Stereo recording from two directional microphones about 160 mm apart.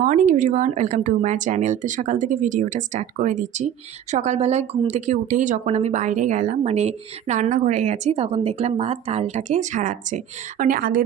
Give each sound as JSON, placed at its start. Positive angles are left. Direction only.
{"t": 0.0, "sound": "speech", "side_deg": -50}
{"t": 10.6, "sound": "a woman's voice", "side_deg": -65}